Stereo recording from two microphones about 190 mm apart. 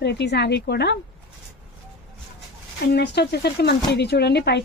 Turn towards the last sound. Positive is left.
turn(degrees=60)  # may be behind; listen again after turning